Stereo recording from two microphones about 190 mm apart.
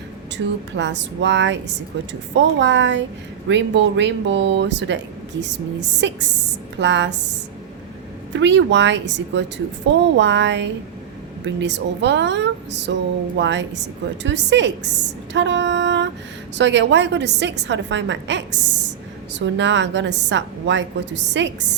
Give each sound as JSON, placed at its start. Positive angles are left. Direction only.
{"t": 0.4, "sound": "a woman's voice", "side_deg": -90}
{"t": 0.8, "sound": "a woman's voice", "side_deg": -70}
{"t": 6.0, "sound": "a woman's voice", "side_deg": -70}
{"t": 8.3, "sound": "a woman's voice", "side_deg": -70}
{"t": 15.3, "sound": "a sound", "side_deg": -70}
{"t": 16.6, "sound": "a woman's voice", "side_deg": -70}